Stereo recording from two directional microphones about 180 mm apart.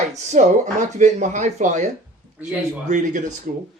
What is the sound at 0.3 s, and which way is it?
Speech, 40° right (ahead or behind).